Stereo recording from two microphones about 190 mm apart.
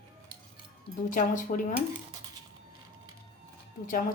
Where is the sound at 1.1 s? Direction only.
45° left (ahead or behind).